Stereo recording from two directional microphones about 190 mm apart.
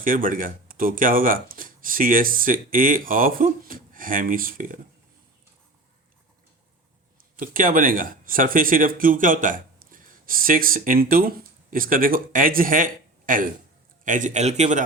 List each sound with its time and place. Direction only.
0.0 s speech: 45° right (ahead or behind)
7.3 s a man's voice: 45° right (ahead or behind)